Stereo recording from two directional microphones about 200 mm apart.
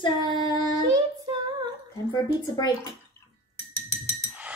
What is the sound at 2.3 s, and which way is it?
Speech, 20° left (ahead or behind).